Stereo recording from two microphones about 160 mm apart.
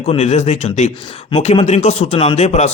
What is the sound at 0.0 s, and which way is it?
Speech, 40° left (ahead or behind).